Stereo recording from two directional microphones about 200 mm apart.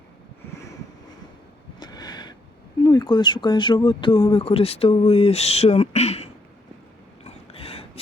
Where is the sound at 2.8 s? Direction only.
20° left (ahead or behind).